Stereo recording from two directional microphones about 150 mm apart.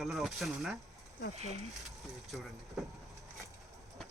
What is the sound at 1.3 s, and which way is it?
Speech, 45° right (ahead or behind).